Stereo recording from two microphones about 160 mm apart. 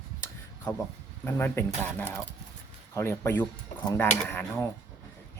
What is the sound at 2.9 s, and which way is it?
A man's voice, 15° left (ahead or behind).